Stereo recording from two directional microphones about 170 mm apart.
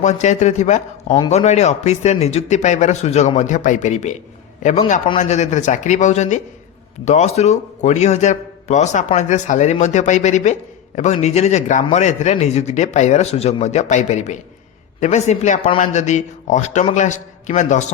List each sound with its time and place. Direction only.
0.0 s a man's voice: 45° left (ahead or behind)